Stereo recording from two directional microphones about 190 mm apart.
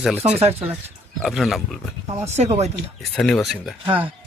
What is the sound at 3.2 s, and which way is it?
Speech, 5° left (ahead or behind).